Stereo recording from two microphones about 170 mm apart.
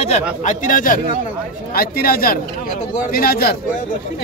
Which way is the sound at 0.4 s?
45° left (ahead or behind).